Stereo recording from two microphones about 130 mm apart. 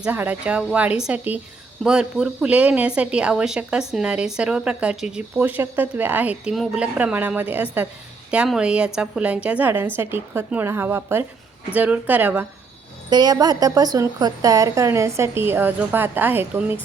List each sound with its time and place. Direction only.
0.0 s a woman's voice: 10° right (ahead or behind)
13.1 s a woman's voice: 35° right (ahead or behind); by 16.7 s 15° right (ahead or behind)